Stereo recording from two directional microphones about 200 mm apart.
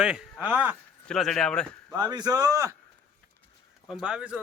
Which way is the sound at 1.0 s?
Centre (ahead or behind).